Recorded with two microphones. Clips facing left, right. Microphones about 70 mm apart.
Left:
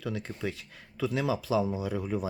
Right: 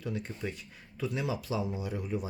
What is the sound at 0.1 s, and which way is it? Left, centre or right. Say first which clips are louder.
Speech: left 2 dB; left.